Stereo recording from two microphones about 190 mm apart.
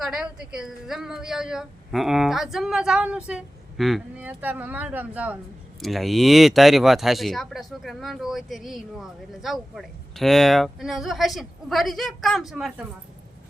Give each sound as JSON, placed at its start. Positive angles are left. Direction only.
{"t": 0.0, "sound": "speech", "side_deg": -5}